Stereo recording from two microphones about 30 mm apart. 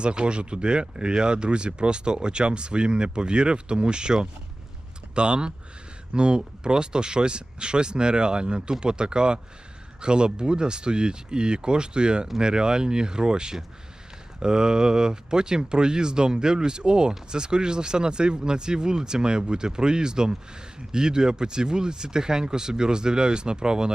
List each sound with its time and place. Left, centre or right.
0.0 s speech: right